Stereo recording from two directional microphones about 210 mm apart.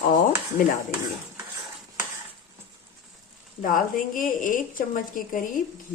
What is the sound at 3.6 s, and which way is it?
A woman's voice, 40° left (ahead or behind).